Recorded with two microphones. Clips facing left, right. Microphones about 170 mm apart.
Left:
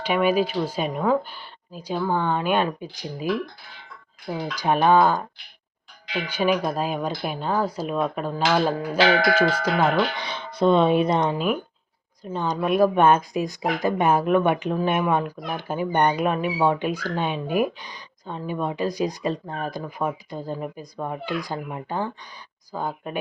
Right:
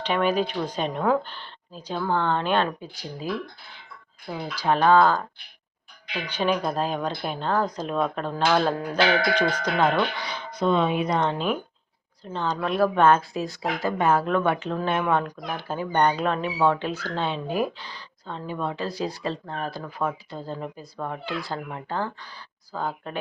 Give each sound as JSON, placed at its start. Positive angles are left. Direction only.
{"t": 0.0, "sound": "speech", "side_deg": 10}
{"t": 4.5, "sound": "speech", "side_deg": 15}
{"t": 10.2, "sound": "speech", "side_deg": 25}
{"t": 11.2, "sound": "speech", "side_deg": 10}